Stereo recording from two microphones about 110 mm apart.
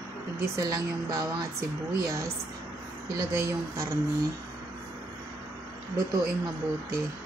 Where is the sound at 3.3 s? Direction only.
20° right (ahead or behind).